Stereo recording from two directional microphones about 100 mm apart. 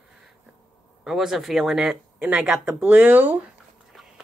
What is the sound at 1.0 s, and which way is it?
Speech, 5° right (ahead or behind).